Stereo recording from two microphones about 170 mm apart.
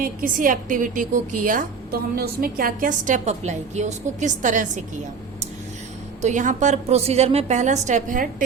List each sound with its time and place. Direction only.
0.0 s a woman's voice: 55° right (ahead or behind)
6.2 s a woman's voice: 50° right (ahead or behind)